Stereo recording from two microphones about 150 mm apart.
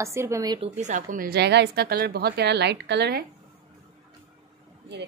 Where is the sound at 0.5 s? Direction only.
50° right (ahead or behind); by 3.2 s 90° right.